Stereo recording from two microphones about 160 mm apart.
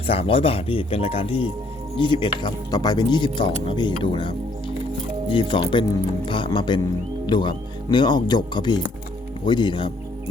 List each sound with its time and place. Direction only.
0.1 s speech: 35° left (ahead or behind)